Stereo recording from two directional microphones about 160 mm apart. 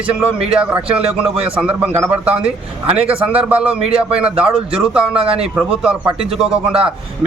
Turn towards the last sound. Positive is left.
turn(degrees=-5)  # may be behind; listen again after turning